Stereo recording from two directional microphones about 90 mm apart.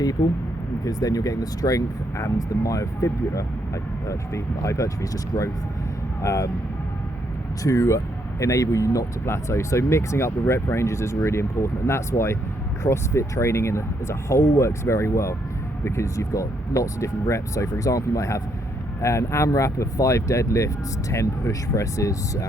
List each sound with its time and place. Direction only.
0.9 s speech: 45° left (ahead or behind)
7.6 s speech: 35° left (ahead or behind)